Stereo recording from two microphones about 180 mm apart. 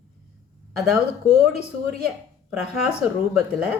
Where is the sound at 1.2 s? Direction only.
35° left (ahead or behind).